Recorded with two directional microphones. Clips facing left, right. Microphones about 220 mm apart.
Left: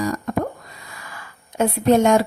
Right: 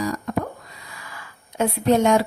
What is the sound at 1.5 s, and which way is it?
Speech, 50° left (ahead or behind).